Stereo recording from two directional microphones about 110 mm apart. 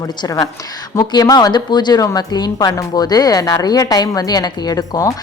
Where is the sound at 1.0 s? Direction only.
35° left (ahead or behind).